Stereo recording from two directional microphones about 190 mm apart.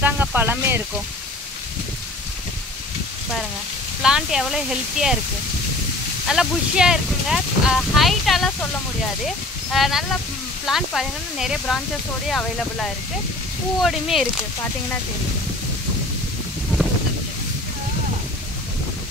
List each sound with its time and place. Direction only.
0.0 s a sound: 10° right (ahead or behind)
4.0 s speech: centre (ahead or behind)
6.2 s speech: 5° right (ahead or behind)